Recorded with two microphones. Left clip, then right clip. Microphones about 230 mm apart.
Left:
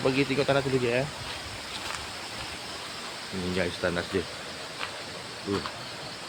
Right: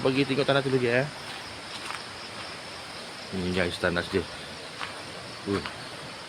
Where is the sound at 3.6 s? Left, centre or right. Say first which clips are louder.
Right 2 dB; centre.